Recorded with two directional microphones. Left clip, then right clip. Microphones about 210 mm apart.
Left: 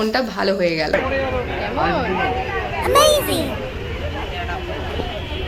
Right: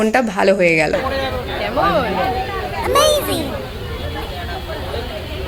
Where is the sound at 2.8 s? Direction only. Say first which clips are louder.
Even; centre (ahead or behind).